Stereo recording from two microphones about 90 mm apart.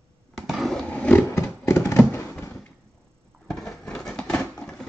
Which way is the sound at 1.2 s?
30° left (ahead or behind).